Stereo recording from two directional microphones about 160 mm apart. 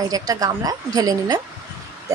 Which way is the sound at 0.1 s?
25° right (ahead or behind).